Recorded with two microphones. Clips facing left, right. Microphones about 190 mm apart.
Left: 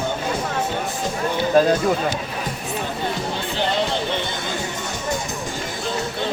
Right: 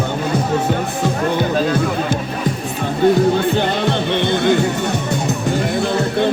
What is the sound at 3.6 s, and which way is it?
Music, 60° right (ahead or behind).